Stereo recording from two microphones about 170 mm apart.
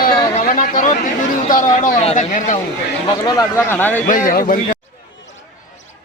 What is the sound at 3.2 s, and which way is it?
Speech, 20° left (ahead or behind).